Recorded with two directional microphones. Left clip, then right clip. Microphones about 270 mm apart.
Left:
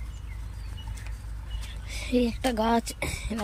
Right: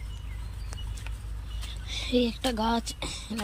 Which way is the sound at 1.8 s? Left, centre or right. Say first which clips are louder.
Even; centre.